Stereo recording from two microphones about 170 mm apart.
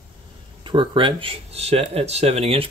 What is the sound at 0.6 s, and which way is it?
Speech, 30° right (ahead or behind).